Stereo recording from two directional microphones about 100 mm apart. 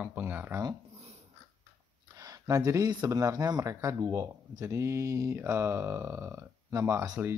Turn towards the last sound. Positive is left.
turn(degrees=-25)  # may be behind; listen again after turning